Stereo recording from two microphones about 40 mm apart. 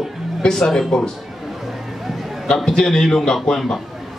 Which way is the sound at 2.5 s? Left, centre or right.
Centre.